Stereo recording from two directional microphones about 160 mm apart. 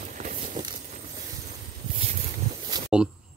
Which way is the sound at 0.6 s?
25° right (ahead or behind).